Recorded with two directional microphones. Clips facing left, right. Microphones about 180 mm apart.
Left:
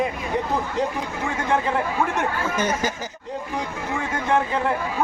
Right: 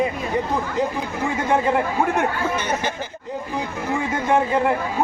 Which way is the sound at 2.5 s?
40° left (ahead or behind).